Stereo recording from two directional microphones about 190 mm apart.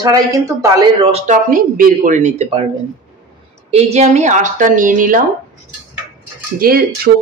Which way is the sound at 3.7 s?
35° right (ahead or behind).